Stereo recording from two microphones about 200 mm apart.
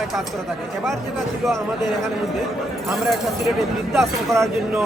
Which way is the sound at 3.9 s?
Centre (ahead or behind).